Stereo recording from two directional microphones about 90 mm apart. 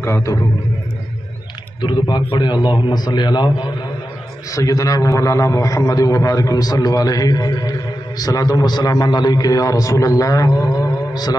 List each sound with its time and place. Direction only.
0.0 s a man's voice: 30° left (ahead or behind)
1.8 s a man's voice: 60° left (ahead or behind)
4.5 s a man's voice: 40° left (ahead or behind)